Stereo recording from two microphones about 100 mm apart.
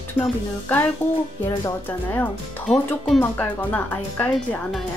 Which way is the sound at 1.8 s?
20° left (ahead or behind).